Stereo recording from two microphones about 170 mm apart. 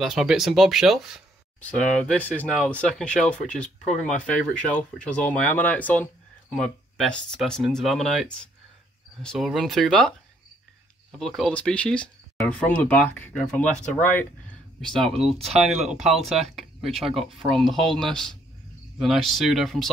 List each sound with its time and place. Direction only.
0.0 s speech: centre (ahead or behind)
15.3 s speech: 35° right (ahead or behind)
15.6 s speech: centre (ahead or behind)